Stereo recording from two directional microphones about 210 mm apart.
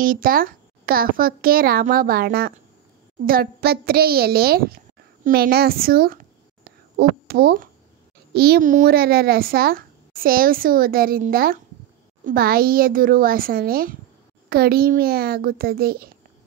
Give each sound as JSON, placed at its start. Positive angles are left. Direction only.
{"t": 0.0, "sound": "speech", "side_deg": -40}